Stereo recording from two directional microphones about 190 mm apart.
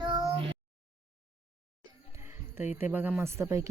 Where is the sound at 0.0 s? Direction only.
20° right (ahead or behind).